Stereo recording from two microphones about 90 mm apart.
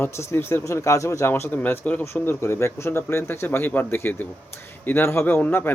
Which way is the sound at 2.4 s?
30° left (ahead or behind).